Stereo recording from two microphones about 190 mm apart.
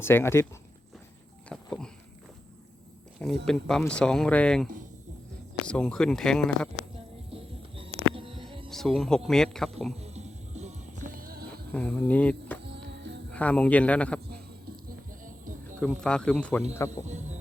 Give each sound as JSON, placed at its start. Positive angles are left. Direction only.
{"t": 0.0, "sound": "speech", "side_deg": 10}
{"t": 1.5, "sound": "a sound", "side_deg": 5}
{"t": 3.4, "sound": "speech", "side_deg": 5}
{"t": 7.3, "sound": "a sound", "side_deg": -30}
{"t": 8.7, "sound": "speech", "side_deg": 0}
{"t": 10.0, "sound": "music", "side_deg": -35}
{"t": 11.7, "sound": "speech", "side_deg": 5}
{"t": 12.6, "sound": "music", "side_deg": -65}
{"t": 13.3, "sound": "speech", "side_deg": 5}
{"t": 16.0, "sound": "speech", "side_deg": 5}
{"t": 17.1, "sound": "speech", "side_deg": -40}